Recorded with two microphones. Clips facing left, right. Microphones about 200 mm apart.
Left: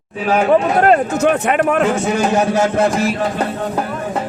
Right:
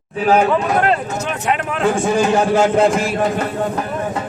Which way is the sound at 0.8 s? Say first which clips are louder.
Left 5 dB; 50° left (ahead or behind).